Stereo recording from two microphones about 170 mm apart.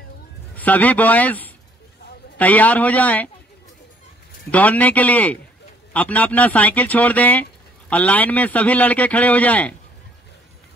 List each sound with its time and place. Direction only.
0.6 s a man's voice: 10° left (ahead or behind)
4.5 s a man's voice: 10° left (ahead or behind)